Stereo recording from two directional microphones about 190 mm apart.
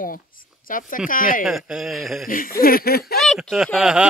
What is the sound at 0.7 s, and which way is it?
Speech, 45° left (ahead or behind).